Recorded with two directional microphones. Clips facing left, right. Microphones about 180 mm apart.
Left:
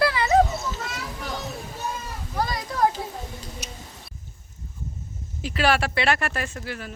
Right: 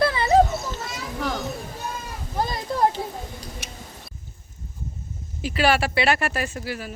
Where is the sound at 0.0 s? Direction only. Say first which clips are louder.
Right 1 dB; 25° right (ahead or behind).